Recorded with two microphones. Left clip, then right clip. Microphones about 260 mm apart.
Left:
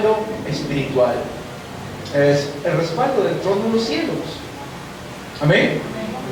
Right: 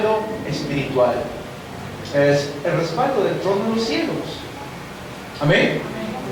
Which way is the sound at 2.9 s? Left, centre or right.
Centre.